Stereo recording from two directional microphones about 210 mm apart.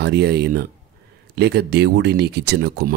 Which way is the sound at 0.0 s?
50° right (ahead or behind).